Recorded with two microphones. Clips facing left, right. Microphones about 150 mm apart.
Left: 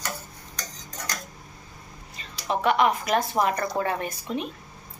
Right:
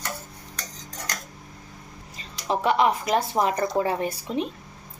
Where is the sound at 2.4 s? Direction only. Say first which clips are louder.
Right 1 dB; 30° right (ahead or behind).